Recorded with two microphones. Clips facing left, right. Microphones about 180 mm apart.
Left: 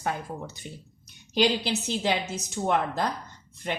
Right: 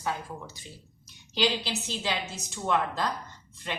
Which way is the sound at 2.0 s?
50° left (ahead or behind).